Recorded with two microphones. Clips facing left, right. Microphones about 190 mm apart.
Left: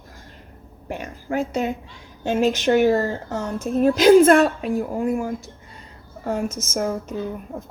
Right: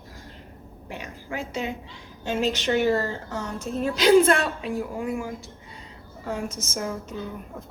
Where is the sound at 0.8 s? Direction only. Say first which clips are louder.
Left 7 dB; 50° left (ahead or behind).